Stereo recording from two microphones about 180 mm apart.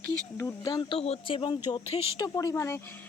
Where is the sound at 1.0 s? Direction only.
30° left (ahead or behind).